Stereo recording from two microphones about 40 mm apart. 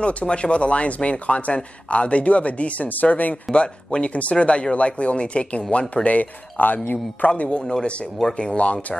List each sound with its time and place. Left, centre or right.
0.0 s speech: left
3.5 s speech: left
6.0 s speech: left
7.2 s speech: left
8.2 s speech: centre